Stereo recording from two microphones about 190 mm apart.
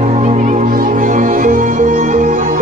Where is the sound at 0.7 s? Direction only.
45° right (ahead or behind).